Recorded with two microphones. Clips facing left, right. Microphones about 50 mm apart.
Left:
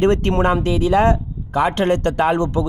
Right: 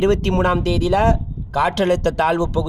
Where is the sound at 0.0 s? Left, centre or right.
Left.